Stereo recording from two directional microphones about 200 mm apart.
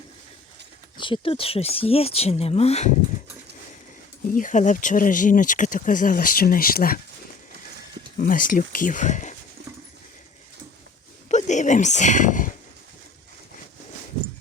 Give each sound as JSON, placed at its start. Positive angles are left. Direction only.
{"t": 0.9, "sound": "speech", "side_deg": 25}
{"t": 4.4, "sound": "speech", "side_deg": 40}
{"t": 8.2, "sound": "speech", "side_deg": 45}
{"t": 11.3, "sound": "speech", "side_deg": 35}